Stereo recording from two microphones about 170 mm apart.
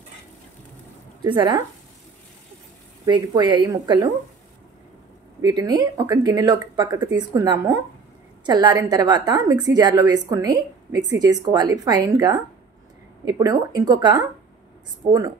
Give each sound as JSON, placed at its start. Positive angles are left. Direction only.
{"t": 1.2, "sound": "a woman's voice", "side_deg": -25}
{"t": 3.1, "sound": "a woman's voice", "side_deg": -25}
{"t": 5.4, "sound": "a woman's voice", "side_deg": -20}